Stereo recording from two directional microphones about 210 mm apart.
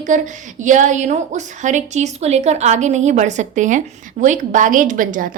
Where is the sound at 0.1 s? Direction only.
35° right (ahead or behind).